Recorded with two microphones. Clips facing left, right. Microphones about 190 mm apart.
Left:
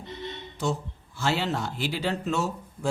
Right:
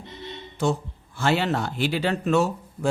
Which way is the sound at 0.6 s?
55° right (ahead or behind).